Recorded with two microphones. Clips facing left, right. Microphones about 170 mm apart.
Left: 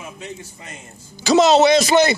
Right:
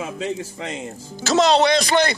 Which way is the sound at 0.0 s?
90° right.